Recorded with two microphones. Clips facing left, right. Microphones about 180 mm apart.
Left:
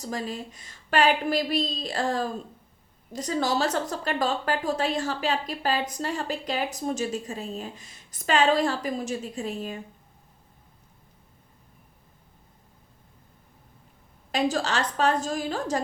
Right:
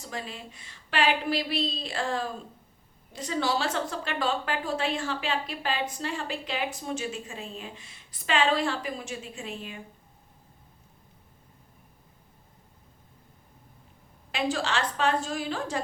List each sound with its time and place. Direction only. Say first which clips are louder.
0.0 s a woman's voice: left 6 dB; 40° left (ahead or behind)
14.3 s a woman's voice: left 3 dB; 40° left (ahead or behind)